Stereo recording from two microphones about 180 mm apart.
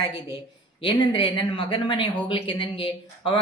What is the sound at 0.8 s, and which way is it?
Speech, 25° left (ahead or behind).